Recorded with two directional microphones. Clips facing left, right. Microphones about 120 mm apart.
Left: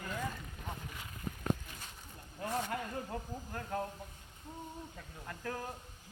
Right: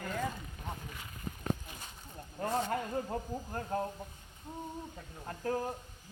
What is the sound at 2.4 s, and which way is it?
A woman's voice, 35° right (ahead or behind).